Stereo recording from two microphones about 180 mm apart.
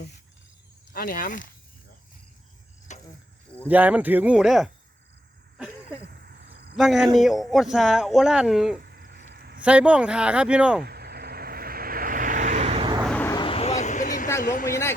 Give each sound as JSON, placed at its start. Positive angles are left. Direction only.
{"t": 0.9, "sound": "speech", "side_deg": 50}
{"t": 2.9, "sound": "cricket", "side_deg": 40}
{"t": 3.7, "sound": "speech", "side_deg": -10}
{"t": 5.5, "sound": "a sound", "side_deg": -5}
{"t": 6.0, "sound": "a sound", "side_deg": -65}
{"t": 6.7, "sound": "speech", "side_deg": 0}
{"t": 8.9, "sound": "a sound", "side_deg": -60}
{"t": 9.6, "sound": "speech", "side_deg": -5}
{"t": 10.8, "sound": "vehicle", "side_deg": -60}
{"t": 13.1, "sound": "vehicle", "side_deg": 10}
{"t": 13.3, "sound": "vehicle", "side_deg": 30}
{"t": 14.4, "sound": "speech", "side_deg": 50}